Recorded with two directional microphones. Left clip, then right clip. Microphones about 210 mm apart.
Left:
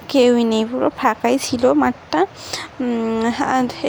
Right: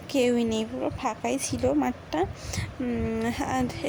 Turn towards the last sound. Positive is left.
turn(degrees=15)  # may be behind; listen again after turning